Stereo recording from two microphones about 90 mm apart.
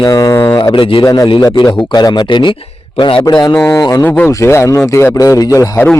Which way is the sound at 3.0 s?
80° left.